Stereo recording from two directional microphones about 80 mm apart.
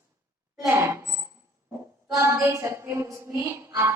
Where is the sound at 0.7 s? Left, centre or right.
Right.